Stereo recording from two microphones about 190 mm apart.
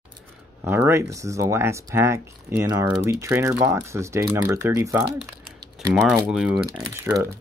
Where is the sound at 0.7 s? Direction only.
10° right (ahead or behind).